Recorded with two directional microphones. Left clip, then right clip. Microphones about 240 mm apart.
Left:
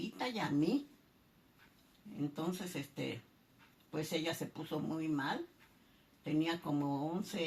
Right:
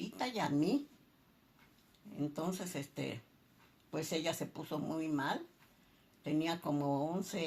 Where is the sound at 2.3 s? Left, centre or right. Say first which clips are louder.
Right 1 dB; right.